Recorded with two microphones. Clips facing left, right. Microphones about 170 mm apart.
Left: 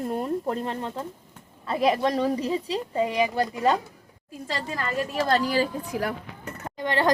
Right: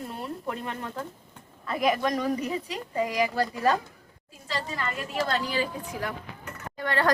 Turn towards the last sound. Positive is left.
turn(degrees=20)  # may be behind; listen again after turning